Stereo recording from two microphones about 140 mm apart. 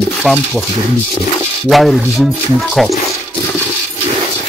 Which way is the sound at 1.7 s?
Centre (ahead or behind).